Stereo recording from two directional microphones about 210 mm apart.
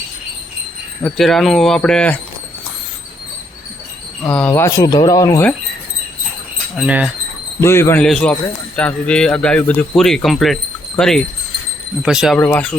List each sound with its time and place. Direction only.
1.0 s speech: centre (ahead or behind)
4.2 s speech: 5° left (ahead or behind)
6.7 s speech: 5° right (ahead or behind)
7.6 s speech: 10° left (ahead or behind)
12.4 s speech: 10° left (ahead or behind)